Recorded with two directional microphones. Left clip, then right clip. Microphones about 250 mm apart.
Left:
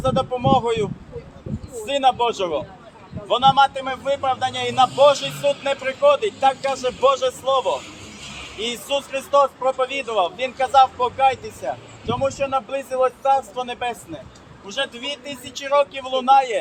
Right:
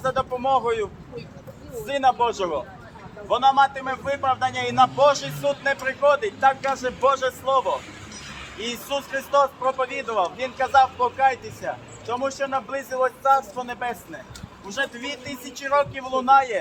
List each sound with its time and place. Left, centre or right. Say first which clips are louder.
0.0 s speech: left 3 dB; left
1.9 s speech: left 2 dB; centre
8.6 s speech: left 4 dB; centre